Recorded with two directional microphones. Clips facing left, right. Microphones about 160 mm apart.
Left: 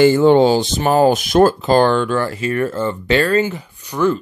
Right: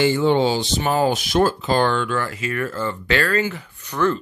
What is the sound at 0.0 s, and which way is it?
Speech, 45° left (ahead or behind).